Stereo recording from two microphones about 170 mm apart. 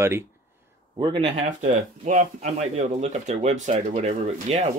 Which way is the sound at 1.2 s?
45° right (ahead or behind).